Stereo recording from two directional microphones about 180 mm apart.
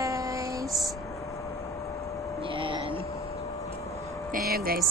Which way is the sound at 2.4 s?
30° right (ahead or behind).